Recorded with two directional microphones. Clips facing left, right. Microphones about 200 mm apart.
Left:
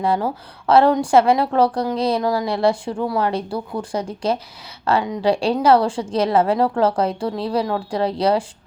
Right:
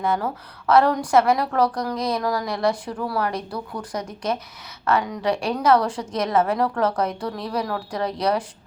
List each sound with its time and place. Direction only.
0.0 s a woman's voice: 30° left (ahead or behind)